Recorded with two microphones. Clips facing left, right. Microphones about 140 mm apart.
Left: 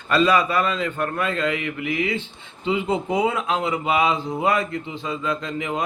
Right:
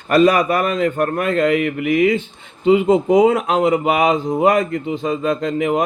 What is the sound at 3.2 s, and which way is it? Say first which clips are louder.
Speech: right 8 dB; 40° right (ahead or behind).